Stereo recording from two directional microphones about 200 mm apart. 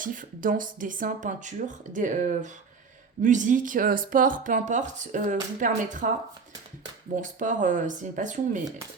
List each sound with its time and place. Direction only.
0.0 s speech: 40° right (ahead or behind)
7.2 s speech: 40° right (ahead or behind)